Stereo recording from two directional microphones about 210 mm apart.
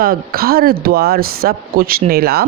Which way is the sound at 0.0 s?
45° right (ahead or behind).